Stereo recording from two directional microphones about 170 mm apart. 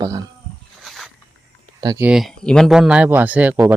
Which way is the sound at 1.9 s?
5° right (ahead or behind).